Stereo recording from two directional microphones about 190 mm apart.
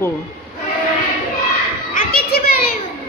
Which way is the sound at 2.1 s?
55° left (ahead or behind).